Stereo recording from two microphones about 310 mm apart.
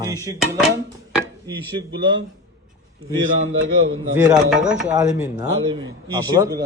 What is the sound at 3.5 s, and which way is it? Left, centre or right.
Speech, right.